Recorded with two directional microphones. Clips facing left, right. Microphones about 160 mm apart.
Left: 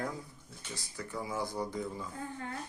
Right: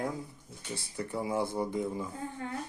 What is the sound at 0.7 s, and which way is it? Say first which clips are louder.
Speech: right 5 dB; 30° right (ahead or behind).